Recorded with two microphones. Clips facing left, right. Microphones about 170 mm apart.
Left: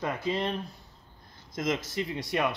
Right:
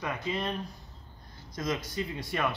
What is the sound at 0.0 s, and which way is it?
Speech, 30° left (ahead or behind).